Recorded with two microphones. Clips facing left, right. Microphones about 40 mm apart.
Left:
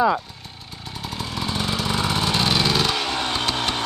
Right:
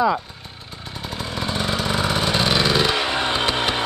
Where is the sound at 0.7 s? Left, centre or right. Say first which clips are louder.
Right 1 dB; centre.